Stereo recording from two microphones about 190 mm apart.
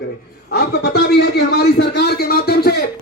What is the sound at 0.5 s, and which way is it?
A man's voice, 55° left (ahead or behind).